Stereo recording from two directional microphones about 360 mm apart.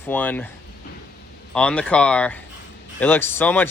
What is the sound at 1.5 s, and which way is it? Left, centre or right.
Speech, centre.